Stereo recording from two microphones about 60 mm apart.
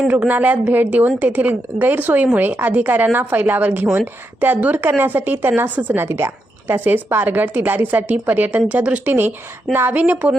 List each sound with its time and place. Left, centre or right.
0.1 s a woman's voice: right
6.0 s a woman's voice: right
6.7 s a woman's voice: right
9.7 s a woman's voice: right